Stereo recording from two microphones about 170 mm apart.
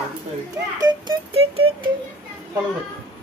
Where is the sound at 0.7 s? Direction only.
25° right (ahead or behind).